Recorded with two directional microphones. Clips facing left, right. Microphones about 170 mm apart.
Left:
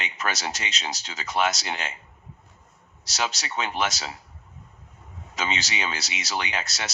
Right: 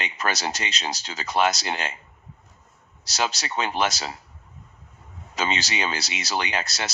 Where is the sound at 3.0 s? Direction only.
35° right (ahead or behind).